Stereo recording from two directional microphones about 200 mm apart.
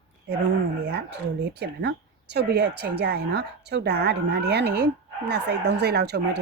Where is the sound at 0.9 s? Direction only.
55° right (ahead or behind).